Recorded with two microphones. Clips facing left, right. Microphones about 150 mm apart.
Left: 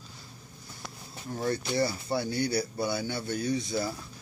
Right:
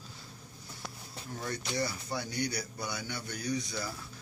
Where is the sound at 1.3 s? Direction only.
30° left (ahead or behind).